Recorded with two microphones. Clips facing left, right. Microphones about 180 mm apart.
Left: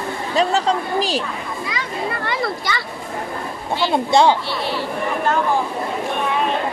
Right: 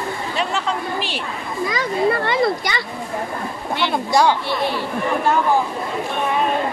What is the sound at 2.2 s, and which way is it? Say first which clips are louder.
Speech: right 4 dB; 20° right (ahead or behind).